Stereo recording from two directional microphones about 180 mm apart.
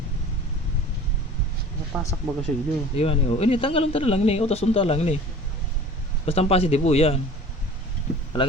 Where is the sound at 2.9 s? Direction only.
35° left (ahead or behind).